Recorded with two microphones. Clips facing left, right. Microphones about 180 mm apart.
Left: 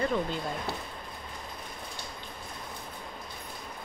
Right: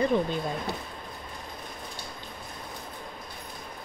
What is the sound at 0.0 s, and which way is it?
Speech, 15° right (ahead or behind).